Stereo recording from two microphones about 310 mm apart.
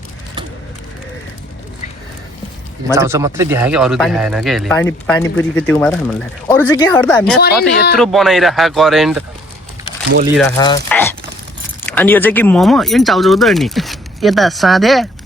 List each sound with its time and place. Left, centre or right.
2.9 s speech: centre
7.4 s speech: left
7.9 s speech: centre
10.6 s speech: centre